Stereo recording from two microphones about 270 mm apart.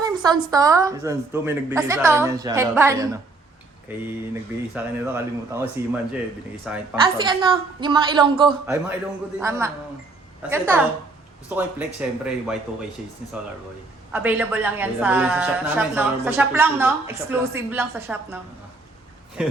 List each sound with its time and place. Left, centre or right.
0.0 s a woman's voice: centre
7.0 s a woman's voice: centre
14.1 s a woman's voice: centre
19.4 s speech: centre